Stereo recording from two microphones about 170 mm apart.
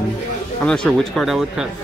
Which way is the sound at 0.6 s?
5° left (ahead or behind).